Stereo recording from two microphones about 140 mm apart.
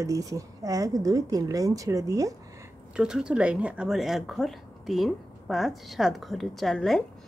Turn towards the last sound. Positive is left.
turn(degrees=0)  # may be behind; listen again after turning